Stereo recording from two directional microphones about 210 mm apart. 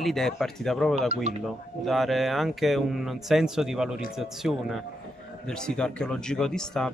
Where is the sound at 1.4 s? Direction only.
Centre (ahead or behind).